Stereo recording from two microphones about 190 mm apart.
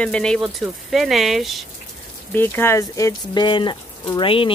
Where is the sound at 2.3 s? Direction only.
10° left (ahead or behind).